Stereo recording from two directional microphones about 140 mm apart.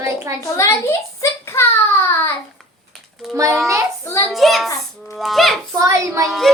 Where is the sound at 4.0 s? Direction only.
20° left (ahead or behind).